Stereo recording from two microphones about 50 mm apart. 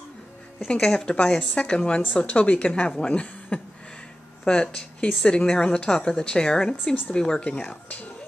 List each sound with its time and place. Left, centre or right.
0.7 s a woman's voice: centre
4.5 s a woman's voice: centre